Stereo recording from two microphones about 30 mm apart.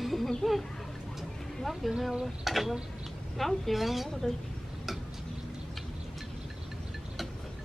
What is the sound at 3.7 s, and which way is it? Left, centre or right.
Speech, centre.